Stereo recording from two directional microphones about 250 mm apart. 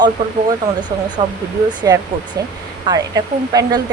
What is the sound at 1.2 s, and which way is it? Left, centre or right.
Speech, right.